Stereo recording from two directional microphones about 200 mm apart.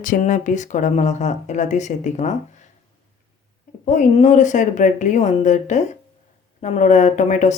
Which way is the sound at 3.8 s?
35° left (ahead or behind).